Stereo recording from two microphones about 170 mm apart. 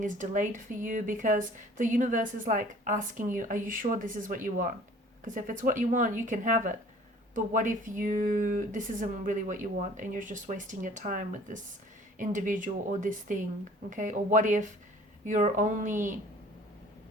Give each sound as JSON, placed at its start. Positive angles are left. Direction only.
{"t": 0.0, "sound": "speech", "side_deg": -50}